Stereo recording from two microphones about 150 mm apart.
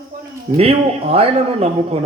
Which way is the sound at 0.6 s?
40° right (ahead or behind).